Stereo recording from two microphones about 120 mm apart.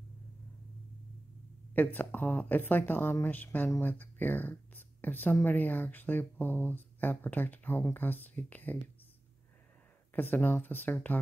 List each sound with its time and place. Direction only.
1.8 s speech: 15° left (ahead or behind)
10.1 s speech: 15° left (ahead or behind)